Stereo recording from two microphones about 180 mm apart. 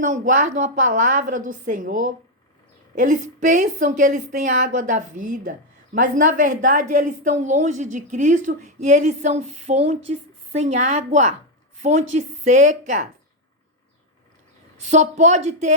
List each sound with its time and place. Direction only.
0.0 s a woman's voice: 45° right (ahead or behind)
14.8 s speech: 40° right (ahead or behind)